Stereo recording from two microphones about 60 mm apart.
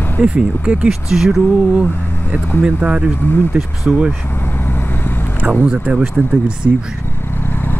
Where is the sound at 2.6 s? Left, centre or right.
Centre.